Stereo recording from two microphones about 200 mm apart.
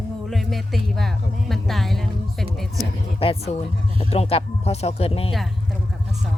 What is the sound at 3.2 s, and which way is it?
Speech, 30° left (ahead or behind).